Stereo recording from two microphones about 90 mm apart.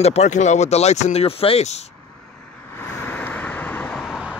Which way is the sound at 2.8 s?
20° left (ahead or behind).